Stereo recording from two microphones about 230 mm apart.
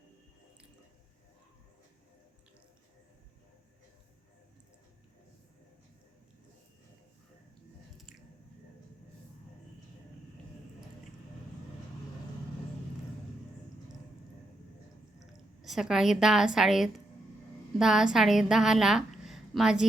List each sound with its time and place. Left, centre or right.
15.6 s a woman's voice: centre